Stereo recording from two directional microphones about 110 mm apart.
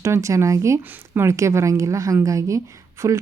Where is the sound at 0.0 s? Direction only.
25° right (ahead or behind).